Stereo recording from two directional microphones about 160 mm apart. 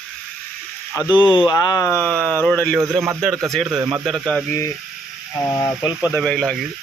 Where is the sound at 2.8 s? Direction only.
20° right (ahead or behind).